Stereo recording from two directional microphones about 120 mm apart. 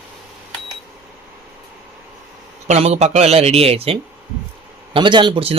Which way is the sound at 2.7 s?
60° right (ahead or behind).